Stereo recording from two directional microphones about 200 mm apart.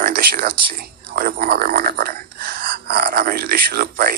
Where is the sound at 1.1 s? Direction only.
50° right (ahead or behind).